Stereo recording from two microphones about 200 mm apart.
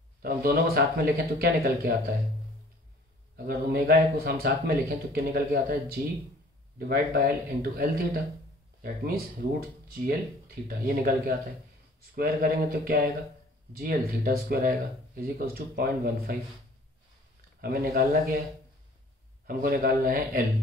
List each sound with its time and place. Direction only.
0.2 s speech: 45° right (ahead or behind)
3.4 s speech: 45° right (ahead or behind)
6.9 s speech: 45° right (ahead or behind)
9.9 s speech: 50° right (ahead or behind)
17.6 s speech: 45° right (ahead or behind)
19.4 s speech: 50° right (ahead or behind)